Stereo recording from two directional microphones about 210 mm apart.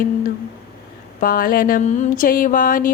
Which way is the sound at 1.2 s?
45° left (ahead or behind).